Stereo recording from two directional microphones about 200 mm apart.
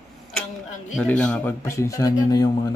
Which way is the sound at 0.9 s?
5° left (ahead or behind).